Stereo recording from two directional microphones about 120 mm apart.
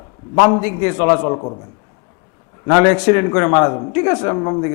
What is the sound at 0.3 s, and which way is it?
A man's voice, 25° left (ahead or behind).